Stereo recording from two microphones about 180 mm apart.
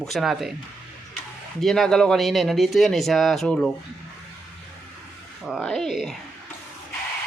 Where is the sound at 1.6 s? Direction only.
Centre (ahead or behind).